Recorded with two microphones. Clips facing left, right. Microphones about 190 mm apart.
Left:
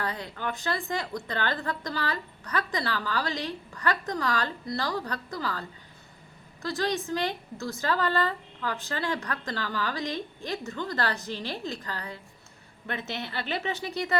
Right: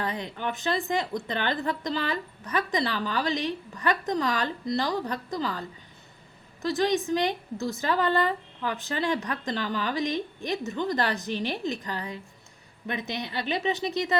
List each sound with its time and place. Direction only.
0.0 s a woman's voice: 20° right (ahead or behind)